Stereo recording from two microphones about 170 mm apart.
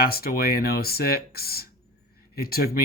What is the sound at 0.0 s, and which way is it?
Speech, 65° left (ahead or behind).